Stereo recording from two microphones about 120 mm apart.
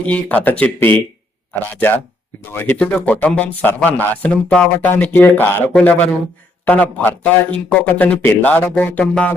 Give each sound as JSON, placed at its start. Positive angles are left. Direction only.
{"t": 0.0, "sound": "a man's voice", "side_deg": 10}